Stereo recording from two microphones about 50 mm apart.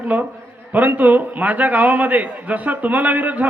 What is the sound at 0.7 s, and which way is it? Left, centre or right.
A man's voice, right.